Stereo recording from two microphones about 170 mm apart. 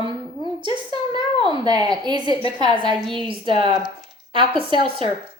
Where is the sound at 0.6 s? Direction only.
25° right (ahead or behind).